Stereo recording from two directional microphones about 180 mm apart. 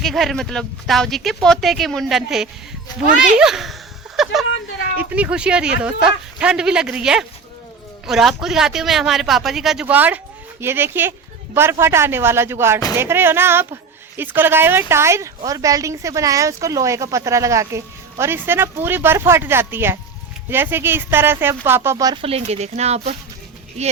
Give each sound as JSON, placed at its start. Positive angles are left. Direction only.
{"t": 0.0, "sound": "speech", "side_deg": 0}
{"t": 4.2, "sound": "a sound", "side_deg": 0}
{"t": 4.9, "sound": "speech", "side_deg": -10}
{"t": 22.2, "sound": "speech", "side_deg": -35}